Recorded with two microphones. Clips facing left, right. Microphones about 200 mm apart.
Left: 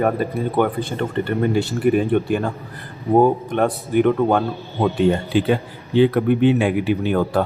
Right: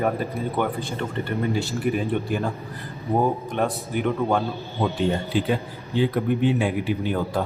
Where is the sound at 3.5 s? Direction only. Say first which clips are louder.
Left 7 dB; 60° left (ahead or behind).